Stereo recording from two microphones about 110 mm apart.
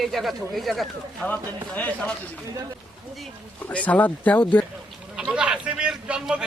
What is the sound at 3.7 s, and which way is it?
Speech, 15° left (ahead or behind).